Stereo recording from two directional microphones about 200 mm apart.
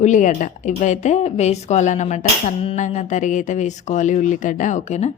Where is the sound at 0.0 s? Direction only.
40° left (ahead or behind).